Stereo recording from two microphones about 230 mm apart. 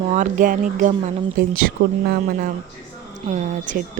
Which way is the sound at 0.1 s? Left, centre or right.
Right.